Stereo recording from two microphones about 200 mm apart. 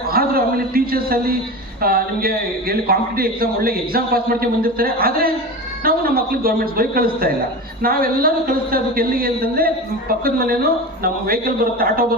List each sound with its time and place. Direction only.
0.1 s a man's voice: 50° right (ahead or behind)